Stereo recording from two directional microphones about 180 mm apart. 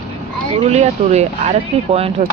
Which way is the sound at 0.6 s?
35° right (ahead or behind).